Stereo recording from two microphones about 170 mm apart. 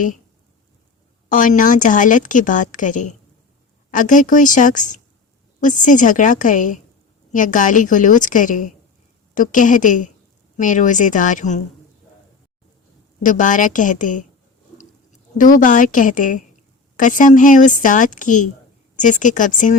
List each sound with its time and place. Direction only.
1.3 s a woman's voice: 50° left (ahead or behind)
13.2 s a woman's voice: 50° left (ahead or behind)
15.4 s a woman's voice: 50° left (ahead or behind)